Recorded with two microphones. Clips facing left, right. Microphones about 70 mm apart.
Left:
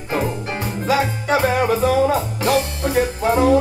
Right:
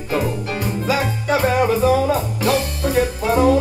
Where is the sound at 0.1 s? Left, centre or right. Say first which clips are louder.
Right 1 dB; left.